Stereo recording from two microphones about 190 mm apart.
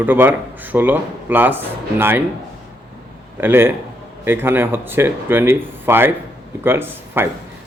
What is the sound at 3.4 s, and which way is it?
A man's voice, 10° right (ahead or behind).